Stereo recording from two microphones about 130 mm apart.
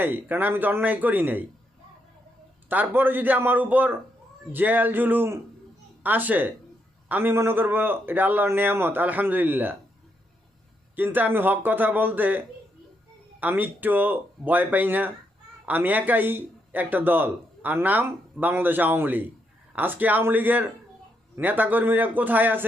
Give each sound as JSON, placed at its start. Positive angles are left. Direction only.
{"t": 0.0, "sound": "speech", "side_deg": -15}
{"t": 2.6, "sound": "speech", "side_deg": -15}
{"t": 10.9, "sound": "speech", "side_deg": -15}
{"t": 13.4, "sound": "speech", "side_deg": -15}